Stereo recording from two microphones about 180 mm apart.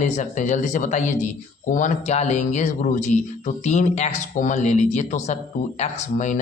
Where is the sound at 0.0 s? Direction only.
40° left (ahead or behind).